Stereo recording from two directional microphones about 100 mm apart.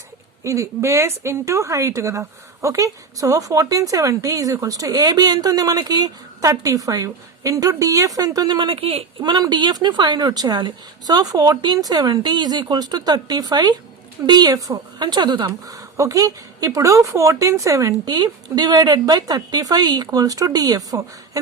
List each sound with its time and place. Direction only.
0.4 s a woman's voice: 30° right (ahead or behind)
8.5 s speech: 60° right (ahead or behind)
9.2 s a woman's voice: 45° right (ahead or behind)